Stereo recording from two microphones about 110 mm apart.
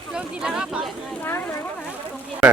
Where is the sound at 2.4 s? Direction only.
10° right (ahead or behind).